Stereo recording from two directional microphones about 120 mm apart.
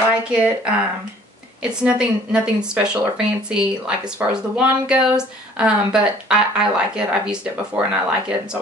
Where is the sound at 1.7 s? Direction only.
5° right (ahead or behind).